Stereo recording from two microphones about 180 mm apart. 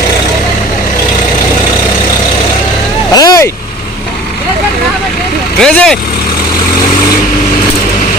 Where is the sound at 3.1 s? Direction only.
20° left (ahead or behind).